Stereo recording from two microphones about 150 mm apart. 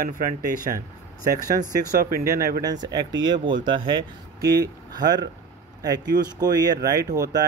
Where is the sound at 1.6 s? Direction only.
70° right (ahead or behind).